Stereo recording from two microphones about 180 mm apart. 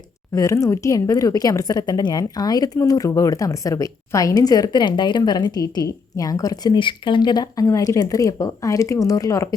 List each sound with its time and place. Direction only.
0.3 s a woman's voice: 15° left (ahead or behind)